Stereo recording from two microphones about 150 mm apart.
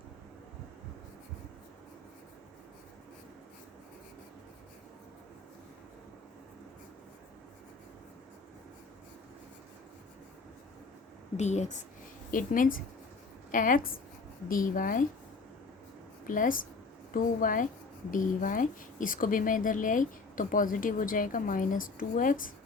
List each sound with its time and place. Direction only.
11.3 s a woman's voice: 50° left (ahead or behind)
12.3 s a woman's voice: 65° left (ahead or behind)
16.2 s a woman's voice: 65° left (ahead or behind)